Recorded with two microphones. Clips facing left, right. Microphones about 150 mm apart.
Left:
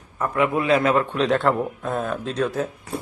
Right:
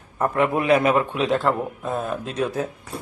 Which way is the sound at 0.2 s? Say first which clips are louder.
Right 1 dB; 30° right (ahead or behind).